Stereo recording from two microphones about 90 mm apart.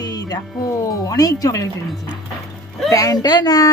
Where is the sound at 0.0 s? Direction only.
45° left (ahead or behind).